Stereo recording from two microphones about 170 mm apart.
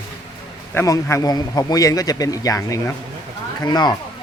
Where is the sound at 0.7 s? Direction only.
15° left (ahead or behind).